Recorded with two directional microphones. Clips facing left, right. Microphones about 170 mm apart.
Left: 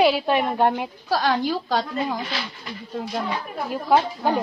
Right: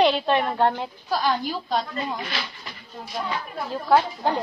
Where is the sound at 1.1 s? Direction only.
85° left.